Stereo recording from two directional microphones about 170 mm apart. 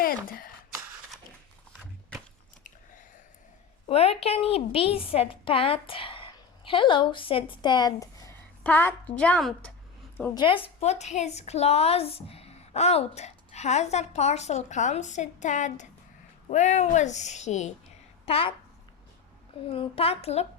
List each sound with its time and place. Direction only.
0.0 s speech: 60° left (ahead or behind)
3.8 s a woman's voice: 35° left (ahead or behind); by 9.7 s 5° left (ahead or behind)
10.3 s a woman's voice: 30° left (ahead or behind)
18.3 s a woman's voice: 35° left (ahead or behind)
19.7 s a woman's voice: 35° left (ahead or behind)